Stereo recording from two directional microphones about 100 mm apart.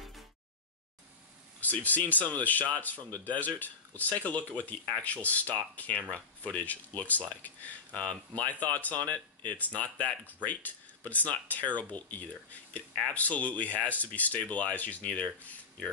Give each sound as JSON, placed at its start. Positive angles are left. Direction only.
{"t": 1.6, "sound": "speech", "side_deg": 15}